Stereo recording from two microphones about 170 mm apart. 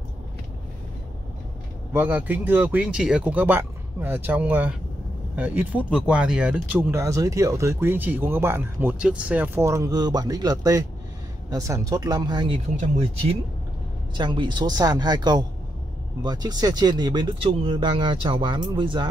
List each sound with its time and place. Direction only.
2.0 s speech: 10° right (ahead or behind); by 12.6 s 30° right (ahead or behind)
14.1 s speech: 25° right (ahead or behind)